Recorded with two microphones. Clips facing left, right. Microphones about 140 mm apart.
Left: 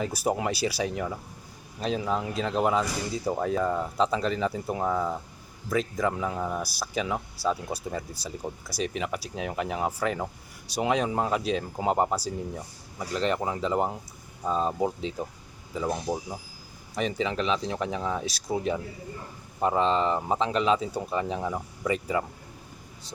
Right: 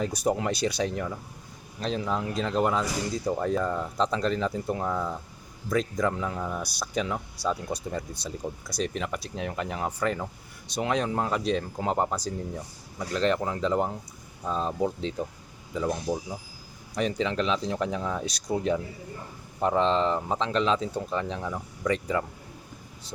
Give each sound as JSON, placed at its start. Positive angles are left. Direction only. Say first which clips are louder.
{"t": 0.0, "sound": "speech", "louder": "right 1 dB", "side_deg": 5}
{"t": 14.7, "sound": "speech", "louder": "even", "side_deg": 20}
{"t": 15.7, "sound": "speech", "louder": "right 1 dB", "side_deg": 5}
{"t": 16.9, "sound": "speech", "louder": "right 1 dB", "side_deg": 0}